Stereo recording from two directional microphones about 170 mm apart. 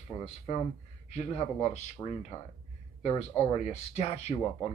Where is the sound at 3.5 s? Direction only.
40° left (ahead or behind).